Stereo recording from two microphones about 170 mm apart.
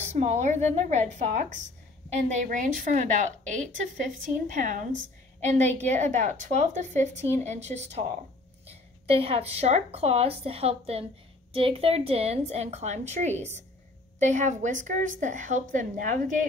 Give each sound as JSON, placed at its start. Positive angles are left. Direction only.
{"t": 0.0, "sound": "a woman's voice", "side_deg": -40}